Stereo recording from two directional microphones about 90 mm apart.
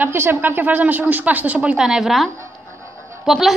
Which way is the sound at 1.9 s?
5° right (ahead or behind).